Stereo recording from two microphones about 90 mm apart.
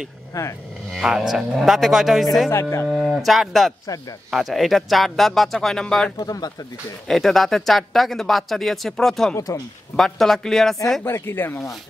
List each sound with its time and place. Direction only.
0.3 s speech: 35° left (ahead or behind)
0.9 s speech: 5° right (ahead or behind)
2.5 s speech: 30° left (ahead or behind)
2.9 s speech: centre (ahead or behind)
6.1 s speech: 45° left (ahead or behind)
7.1 s speech: 5° left (ahead or behind)
11.1 s speech: 25° left (ahead or behind)